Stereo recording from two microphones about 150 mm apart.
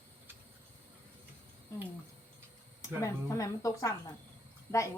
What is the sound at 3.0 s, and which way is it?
Speech, 20° left (ahead or behind).